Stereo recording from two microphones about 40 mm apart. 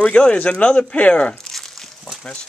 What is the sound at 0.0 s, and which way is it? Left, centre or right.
Speech, left.